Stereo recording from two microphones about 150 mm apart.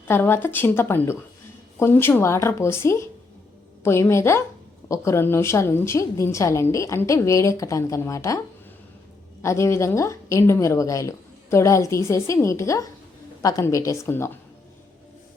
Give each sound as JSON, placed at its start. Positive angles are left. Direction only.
{"t": 0.1, "sound": "a woman's voice", "side_deg": 15}
{"t": 9.4, "sound": "a woman's voice", "side_deg": 20}